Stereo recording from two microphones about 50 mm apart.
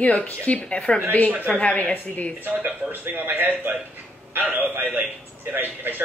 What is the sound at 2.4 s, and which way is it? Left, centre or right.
A man's voice, right.